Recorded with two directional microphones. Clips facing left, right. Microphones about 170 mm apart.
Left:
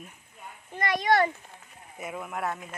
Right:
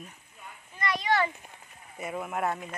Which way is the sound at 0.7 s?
45° left (ahead or behind).